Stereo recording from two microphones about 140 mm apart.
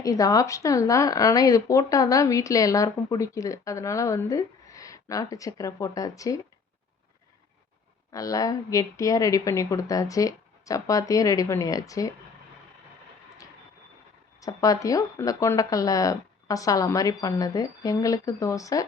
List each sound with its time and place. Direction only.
0.0 s speech: 25° left (ahead or behind)
8.1 s speech: 25° left (ahead or behind)
14.4 s speech: 25° left (ahead or behind)